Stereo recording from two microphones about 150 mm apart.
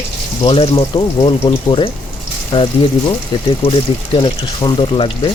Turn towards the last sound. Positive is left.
turn(degrees=35)  # may be behind; listen again after turning